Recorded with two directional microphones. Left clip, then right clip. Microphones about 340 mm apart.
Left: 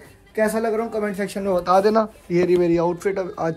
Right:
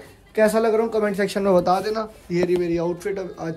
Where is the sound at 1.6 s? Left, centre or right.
Centre.